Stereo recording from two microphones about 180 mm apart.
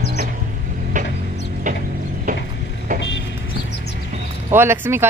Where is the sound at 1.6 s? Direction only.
45° right (ahead or behind).